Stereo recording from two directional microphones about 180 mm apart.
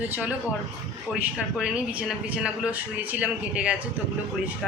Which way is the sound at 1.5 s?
5° right (ahead or behind).